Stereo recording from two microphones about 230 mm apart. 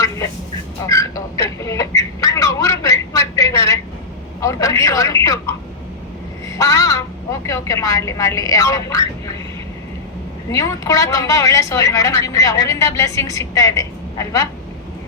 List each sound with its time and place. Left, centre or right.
0.9 s a sound: centre
4.4 s a woman's voice: centre
6.6 s a woman's voice: centre
10.5 s a woman's voice: centre